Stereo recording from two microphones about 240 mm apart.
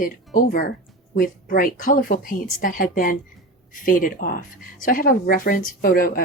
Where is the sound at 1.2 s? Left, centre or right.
Left.